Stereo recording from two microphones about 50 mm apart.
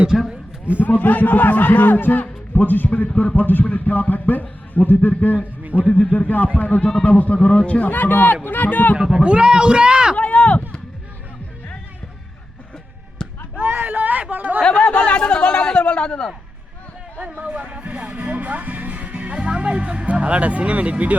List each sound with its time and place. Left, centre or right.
0.1 s a man's voice: centre
0.8 s a man's voice: left
5.4 s a sound: right
5.8 s a man's voice: left
9.2 s a man's voice: centre
10.2 s a sound: left
13.2 s basketball bounce: centre
13.6 s a sound: right
14.6 s speech: left
17.3 s speech: right